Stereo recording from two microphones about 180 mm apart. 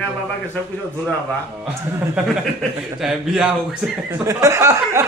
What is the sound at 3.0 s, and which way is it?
Speech, 5° right (ahead or behind).